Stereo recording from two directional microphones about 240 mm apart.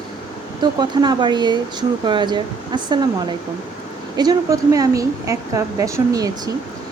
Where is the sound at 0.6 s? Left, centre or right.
Centre.